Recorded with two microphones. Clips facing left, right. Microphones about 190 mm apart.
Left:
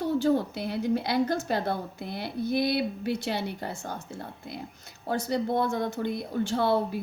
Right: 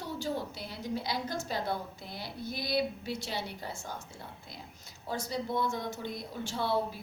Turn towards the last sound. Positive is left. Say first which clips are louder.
# left 6 dB
turn(degrees=60)  # may be behind; listen again after turning